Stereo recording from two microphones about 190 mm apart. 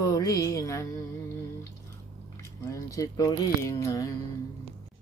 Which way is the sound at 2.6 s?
15° left (ahead or behind).